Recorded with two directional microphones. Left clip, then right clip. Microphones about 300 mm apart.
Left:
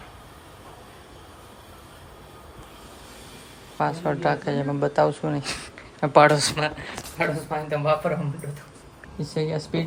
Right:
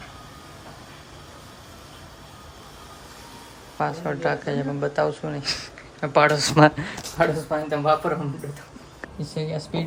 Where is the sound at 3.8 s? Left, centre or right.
Centre.